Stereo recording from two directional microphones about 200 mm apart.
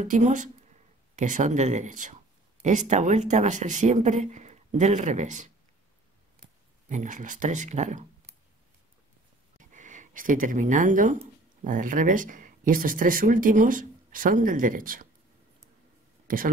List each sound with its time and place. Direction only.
0.0 s speech: 40° right (ahead or behind)
6.9 s speech: 40° right (ahead or behind)
9.6 s speech: 40° right (ahead or behind)